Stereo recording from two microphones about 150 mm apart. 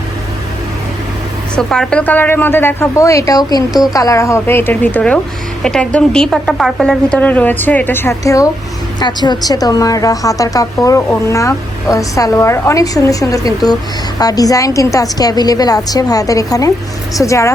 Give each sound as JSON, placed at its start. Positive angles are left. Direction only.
{"t": 1.5, "sound": "a woman's voice", "side_deg": 5}